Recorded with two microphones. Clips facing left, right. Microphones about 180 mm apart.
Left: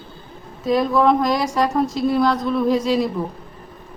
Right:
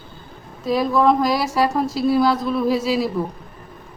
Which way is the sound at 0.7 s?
Centre (ahead or behind).